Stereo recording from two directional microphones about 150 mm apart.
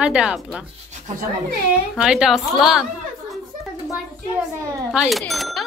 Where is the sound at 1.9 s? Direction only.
5° right (ahead or behind).